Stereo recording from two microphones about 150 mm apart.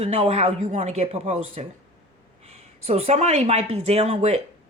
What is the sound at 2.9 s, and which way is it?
A woman's voice, 45° right (ahead or behind).